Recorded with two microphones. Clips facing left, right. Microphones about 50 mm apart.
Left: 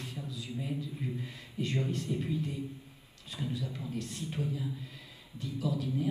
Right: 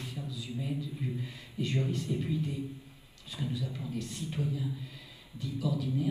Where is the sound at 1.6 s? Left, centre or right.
Left.